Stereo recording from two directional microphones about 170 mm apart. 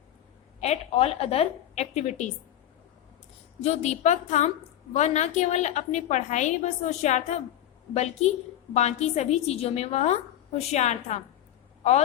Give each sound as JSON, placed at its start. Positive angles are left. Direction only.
{"t": 0.6, "sound": "a woman's voice", "side_deg": 40}
{"t": 3.6, "sound": "a woman's voice", "side_deg": 40}